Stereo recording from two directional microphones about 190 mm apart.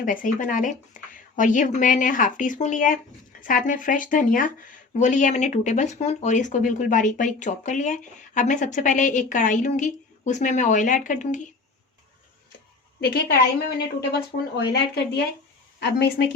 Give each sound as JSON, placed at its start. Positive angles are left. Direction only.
{"t": 0.0, "sound": "speech", "side_deg": 45}
{"t": 13.0, "sound": "a woman's voice", "side_deg": 55}